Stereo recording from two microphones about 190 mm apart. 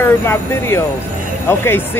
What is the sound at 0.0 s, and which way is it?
Speech, 15° left (ahead or behind).